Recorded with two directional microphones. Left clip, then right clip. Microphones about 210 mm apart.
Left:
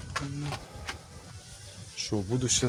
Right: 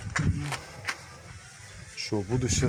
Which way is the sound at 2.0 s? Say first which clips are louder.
Right 1 dB; centre (ahead or behind).